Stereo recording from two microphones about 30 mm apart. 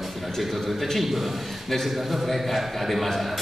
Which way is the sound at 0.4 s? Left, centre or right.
Centre.